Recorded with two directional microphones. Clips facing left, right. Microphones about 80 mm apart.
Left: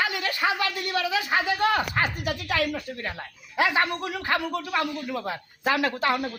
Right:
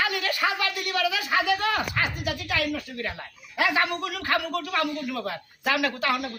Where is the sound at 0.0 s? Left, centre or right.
Left.